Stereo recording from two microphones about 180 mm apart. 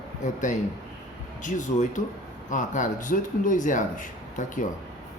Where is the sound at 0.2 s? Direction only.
45° left (ahead or behind).